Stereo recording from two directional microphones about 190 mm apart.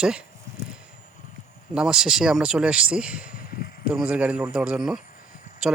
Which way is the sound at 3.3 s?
50° left (ahead or behind).